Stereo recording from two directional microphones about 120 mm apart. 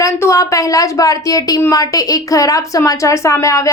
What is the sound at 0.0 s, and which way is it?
A woman's voice, 25° left (ahead or behind).